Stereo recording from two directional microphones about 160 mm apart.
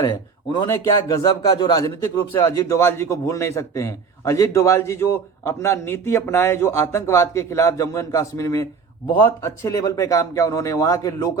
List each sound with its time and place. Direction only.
0.0 s a man's voice: 25° left (ahead or behind)